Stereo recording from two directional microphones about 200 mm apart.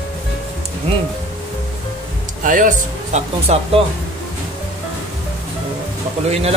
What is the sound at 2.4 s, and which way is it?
Speech, 40° right (ahead or behind).